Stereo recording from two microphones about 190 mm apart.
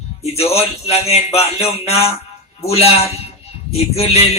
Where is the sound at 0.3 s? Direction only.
30° left (ahead or behind).